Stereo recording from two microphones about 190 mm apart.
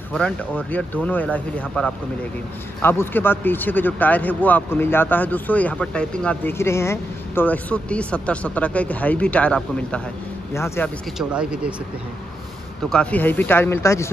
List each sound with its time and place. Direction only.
0.1 s speech: 5° left (ahead or behind)
11.1 s speech: 5° right (ahead or behind)
12.9 s speech: 5° left (ahead or behind)